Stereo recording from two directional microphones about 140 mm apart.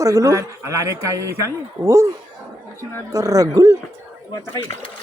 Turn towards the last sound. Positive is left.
turn(degrees=15)  # may be behind; listen again after turning